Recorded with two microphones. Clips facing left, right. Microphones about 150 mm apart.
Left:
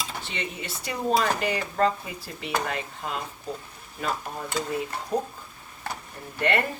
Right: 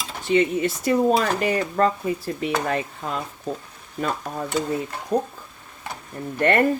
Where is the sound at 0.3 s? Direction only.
45° right (ahead or behind).